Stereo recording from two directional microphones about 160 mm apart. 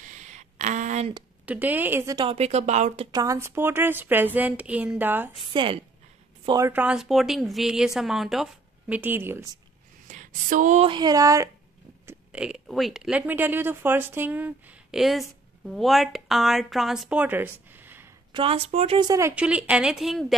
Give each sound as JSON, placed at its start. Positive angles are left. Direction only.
{"t": 0.0, "sound": "a sound", "side_deg": -50}
{"t": 1.4, "sound": "a woman's voice", "side_deg": -10}
{"t": 2.1, "sound": "speech", "side_deg": -35}
{"t": 3.1, "sound": "a woman's voice", "side_deg": -20}
{"t": 5.4, "sound": "speech", "side_deg": -30}
{"t": 6.7, "sound": "speech", "side_deg": -10}
{"t": 10.0, "sound": "speech", "side_deg": -55}
{"t": 10.9, "sound": "speech", "side_deg": -25}
{"t": 12.1, "sound": "speech", "side_deg": -5}
{"t": 18.3, "sound": "speech", "side_deg": -35}
{"t": 18.9, "sound": "speech", "side_deg": -20}
{"t": 19.3, "sound": "speech", "side_deg": -10}